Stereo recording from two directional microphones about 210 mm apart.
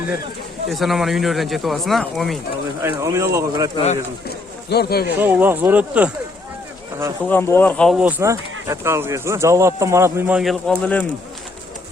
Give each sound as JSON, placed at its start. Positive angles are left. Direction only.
{"t": 0.7, "sound": "speech", "side_deg": 0}
{"t": 2.8, "sound": "speech", "side_deg": -15}
{"t": 4.3, "sound": "a sound", "side_deg": 50}
{"t": 5.2, "sound": "speech", "side_deg": -10}
{"t": 7.3, "sound": "speech", "side_deg": 10}